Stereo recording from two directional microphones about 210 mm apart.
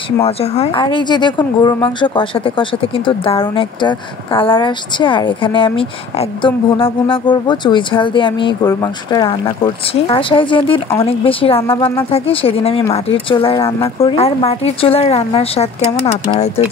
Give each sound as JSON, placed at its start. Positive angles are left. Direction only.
{"t": 0.2, "sound": "speech", "side_deg": 30}